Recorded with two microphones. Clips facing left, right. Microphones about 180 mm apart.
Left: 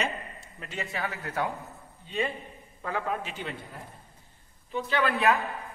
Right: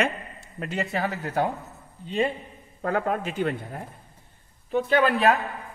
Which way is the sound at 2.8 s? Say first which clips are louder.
Right 6 dB; 50° right (ahead or behind).